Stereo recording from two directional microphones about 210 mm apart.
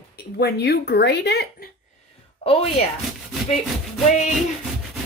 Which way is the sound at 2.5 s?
25° left (ahead or behind).